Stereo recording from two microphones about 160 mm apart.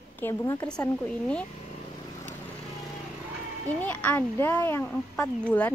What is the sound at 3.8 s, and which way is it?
A woman's voice, 10° left (ahead or behind).